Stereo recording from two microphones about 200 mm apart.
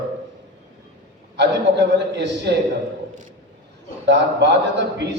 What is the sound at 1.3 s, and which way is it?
A man's voice, 60° right (ahead or behind).